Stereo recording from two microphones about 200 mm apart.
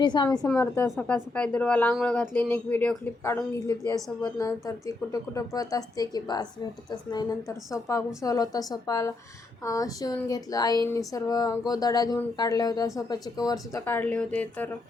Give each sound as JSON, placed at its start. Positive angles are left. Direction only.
{"t": 0.0, "sound": "speech", "side_deg": 20}